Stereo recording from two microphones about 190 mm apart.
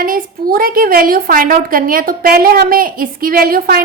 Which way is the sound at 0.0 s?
45° right (ahead or behind).